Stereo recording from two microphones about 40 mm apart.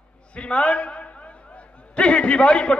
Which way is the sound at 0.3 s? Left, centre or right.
Left.